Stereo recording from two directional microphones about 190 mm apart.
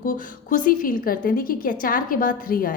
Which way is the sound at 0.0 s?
45° left (ahead or behind).